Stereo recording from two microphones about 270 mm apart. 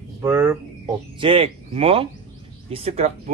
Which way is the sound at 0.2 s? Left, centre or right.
Centre.